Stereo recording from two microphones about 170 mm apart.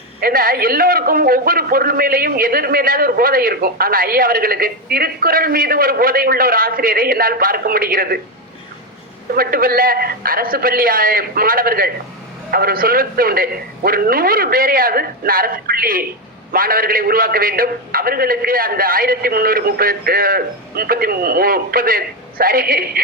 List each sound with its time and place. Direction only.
0.2 s a man's voice: 60° right (ahead or behind)
9.3 s a man's voice: 60° right (ahead or behind)